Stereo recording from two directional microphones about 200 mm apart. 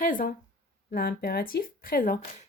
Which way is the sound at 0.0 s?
45° left (ahead or behind).